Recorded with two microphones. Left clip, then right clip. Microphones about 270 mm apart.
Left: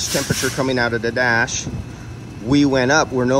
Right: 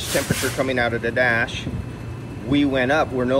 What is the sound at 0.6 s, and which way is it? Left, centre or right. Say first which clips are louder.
Speech: left 2 dB; centre.